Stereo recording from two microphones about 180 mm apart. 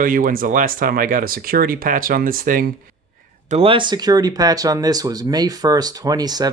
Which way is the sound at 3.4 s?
35° right (ahead or behind).